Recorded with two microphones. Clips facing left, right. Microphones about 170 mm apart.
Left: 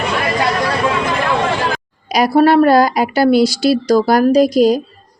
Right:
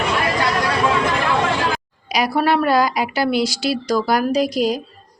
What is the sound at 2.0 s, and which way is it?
A woman's voice, 40° left (ahead or behind).